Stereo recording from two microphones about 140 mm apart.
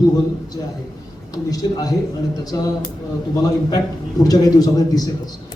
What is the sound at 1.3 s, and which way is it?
Speech, 25° left (ahead or behind).